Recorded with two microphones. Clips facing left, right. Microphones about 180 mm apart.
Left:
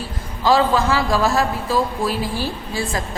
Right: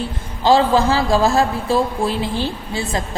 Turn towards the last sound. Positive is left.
turn(degrees=-25)  # may be behind; listen again after turning